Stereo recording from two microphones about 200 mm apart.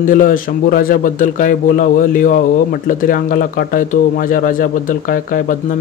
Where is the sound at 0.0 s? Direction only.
40° left (ahead or behind).